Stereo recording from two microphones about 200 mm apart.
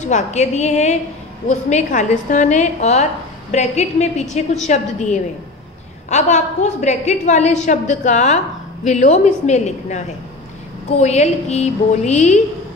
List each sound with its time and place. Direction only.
0.0 s a woman's voice: 35° left (ahead or behind)